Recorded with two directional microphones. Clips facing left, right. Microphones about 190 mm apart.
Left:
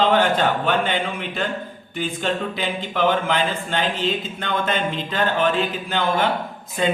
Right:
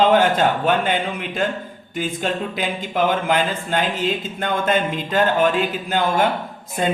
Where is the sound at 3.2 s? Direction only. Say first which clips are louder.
Right 2 dB; 45° right (ahead or behind).